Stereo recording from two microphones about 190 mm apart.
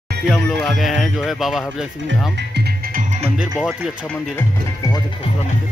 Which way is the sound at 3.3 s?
5° right (ahead or behind).